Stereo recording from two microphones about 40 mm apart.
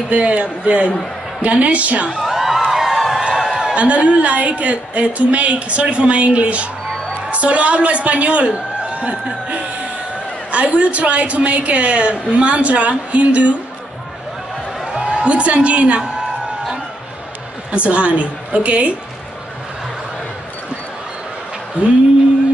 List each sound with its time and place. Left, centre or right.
0.1 s a woman's voice: right
2.0 s music: centre
2.6 s a sound: centre
3.7 s a woman's voice: right
14.9 s a woman's voice: right
17.6 s a woman's voice: right
21.8 s a woman's voice: right